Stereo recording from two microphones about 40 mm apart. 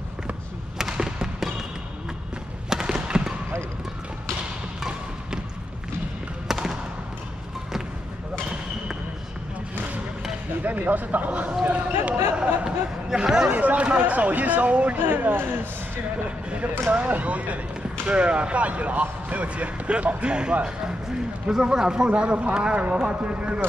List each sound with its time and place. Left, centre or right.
0.7 s basketball bounce: centre
2.7 s fireworks: centre
6.4 s basketball bounce: centre
10.9 s speech: right
12.6 s speech: centre
13.5 s speech: right
15.0 s speech: right
16.3 s speech: right
16.9 s a man's voice: right